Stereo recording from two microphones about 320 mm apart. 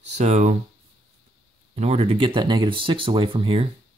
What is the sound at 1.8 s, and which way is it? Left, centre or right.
Speech, centre.